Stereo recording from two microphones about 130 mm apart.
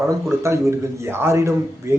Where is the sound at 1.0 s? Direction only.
20° right (ahead or behind).